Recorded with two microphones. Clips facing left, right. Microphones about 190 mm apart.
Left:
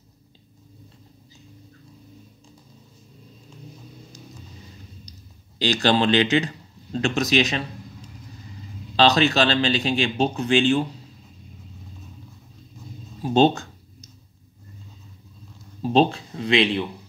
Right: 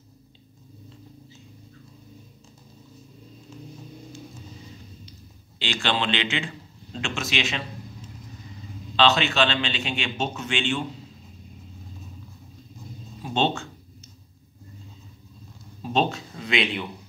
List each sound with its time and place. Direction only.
5.6 s speech: 40° left (ahead or behind)
8.9 s a man's voice: 35° left (ahead or behind)
13.2 s a man's voice: 40° left (ahead or behind)
15.8 s a man's voice: 35° left (ahead or behind)